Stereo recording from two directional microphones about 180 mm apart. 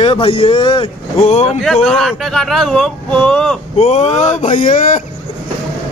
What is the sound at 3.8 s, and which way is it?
Speech, 35° left (ahead or behind).